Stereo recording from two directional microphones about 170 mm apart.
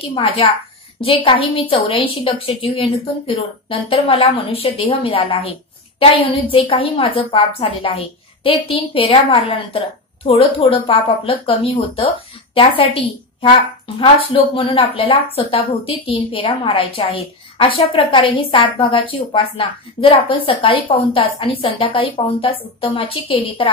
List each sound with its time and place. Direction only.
0.0 s a woman's voice: 30° left (ahead or behind)